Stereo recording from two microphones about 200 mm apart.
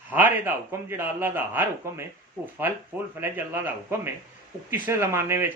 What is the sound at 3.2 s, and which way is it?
Speech, 10° right (ahead or behind).